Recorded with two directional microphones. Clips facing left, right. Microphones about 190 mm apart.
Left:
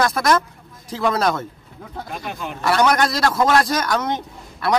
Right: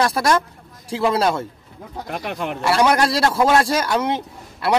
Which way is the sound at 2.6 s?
30° right (ahead or behind).